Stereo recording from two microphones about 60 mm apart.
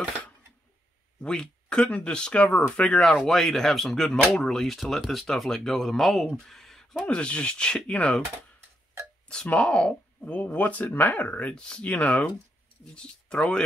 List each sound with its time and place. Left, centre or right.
1.2 s speech: centre
9.5 s speech: centre